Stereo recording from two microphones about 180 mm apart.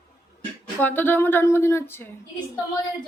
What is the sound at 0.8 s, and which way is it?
A woman's voice, 10° left (ahead or behind).